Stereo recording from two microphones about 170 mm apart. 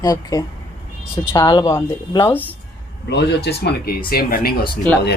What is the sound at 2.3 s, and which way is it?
Speech, 10° left (ahead or behind).